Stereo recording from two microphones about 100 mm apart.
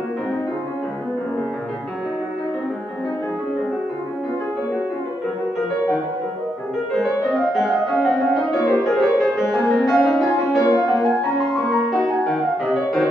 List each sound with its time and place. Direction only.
7.0 s music: centre (ahead or behind)
8.5 s music: 35° left (ahead or behind)
8.9 s music: centre (ahead or behind)
10.6 s music: 40° left (ahead or behind)
11.5 s music: centre (ahead or behind)